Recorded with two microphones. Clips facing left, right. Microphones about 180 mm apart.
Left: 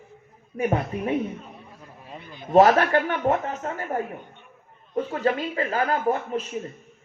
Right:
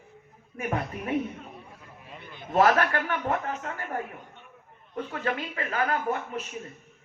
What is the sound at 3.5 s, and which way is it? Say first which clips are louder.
Speech: left 4 dB; 40° left (ahead or behind).